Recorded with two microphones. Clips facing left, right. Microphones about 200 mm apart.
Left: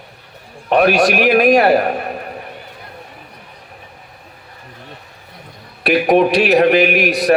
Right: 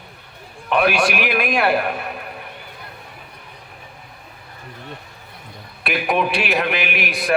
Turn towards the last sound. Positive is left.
turn(degrees=40)  # may be behind; listen again after turning